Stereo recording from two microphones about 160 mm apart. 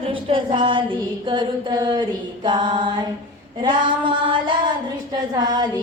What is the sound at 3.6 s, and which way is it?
Female singing, 30° right (ahead or behind).